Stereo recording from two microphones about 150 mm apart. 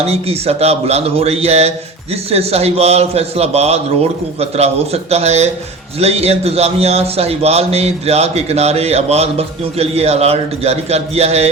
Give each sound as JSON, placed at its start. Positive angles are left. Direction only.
{"t": 0.0, "sound": "a man's voice", "side_deg": -45}